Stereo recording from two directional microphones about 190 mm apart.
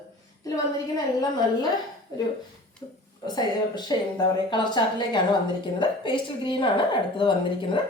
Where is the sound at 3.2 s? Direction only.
20° left (ahead or behind).